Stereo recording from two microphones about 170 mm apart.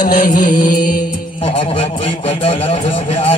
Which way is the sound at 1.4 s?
30° left (ahead or behind).